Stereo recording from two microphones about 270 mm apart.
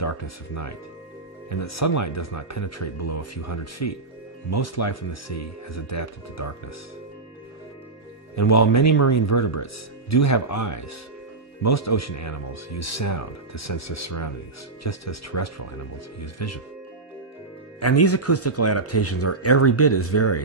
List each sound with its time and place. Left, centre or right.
1.5 s speech: left
8.4 s speech: left
11.6 s speech: left
17.7 s speech: left